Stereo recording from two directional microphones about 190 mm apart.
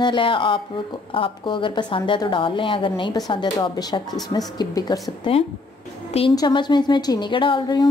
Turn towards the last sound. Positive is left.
turn(degrees=25)  # may be behind; listen again after turning